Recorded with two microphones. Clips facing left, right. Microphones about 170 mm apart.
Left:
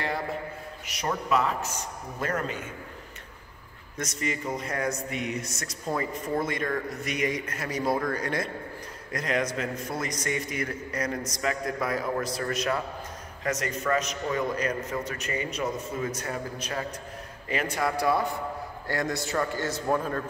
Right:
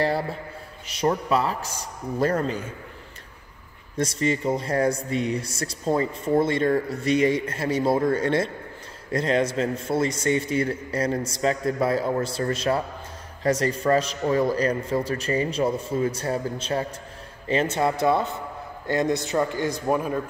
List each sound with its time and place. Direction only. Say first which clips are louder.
0.8 s a man's voice: right 6 dB; 30° right (ahead or behind)
3.9 s a man's voice: right 8 dB; 30° right (ahead or behind); by 20.2 s 10° right (ahead or behind)